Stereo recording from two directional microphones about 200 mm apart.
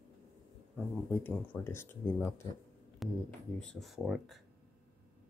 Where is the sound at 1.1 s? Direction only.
10° left (ahead or behind).